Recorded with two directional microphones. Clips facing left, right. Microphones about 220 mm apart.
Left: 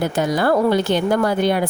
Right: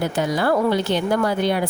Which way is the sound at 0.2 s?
50° left (ahead or behind).